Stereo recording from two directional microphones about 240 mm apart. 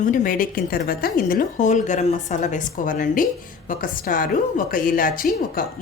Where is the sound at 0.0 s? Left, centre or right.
Left.